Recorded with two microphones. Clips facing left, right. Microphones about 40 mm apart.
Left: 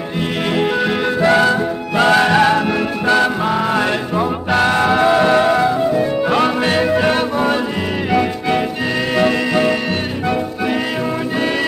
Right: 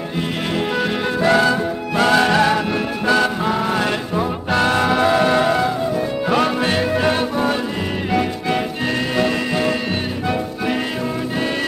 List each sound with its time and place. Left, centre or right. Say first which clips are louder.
0.6 s music: left 4 dB; centre
1.3 s music: left 1 dB; left
2.0 s music: left 3 dB; centre